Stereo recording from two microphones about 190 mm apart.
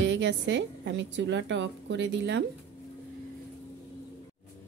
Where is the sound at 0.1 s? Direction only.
70° right (ahead or behind).